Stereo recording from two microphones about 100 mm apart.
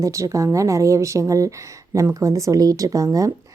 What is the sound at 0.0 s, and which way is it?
Speech, 30° right (ahead or behind).